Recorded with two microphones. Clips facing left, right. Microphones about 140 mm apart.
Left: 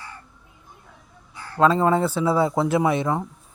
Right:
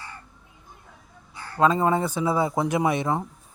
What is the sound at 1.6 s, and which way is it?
Speech, 15° right (ahead or behind).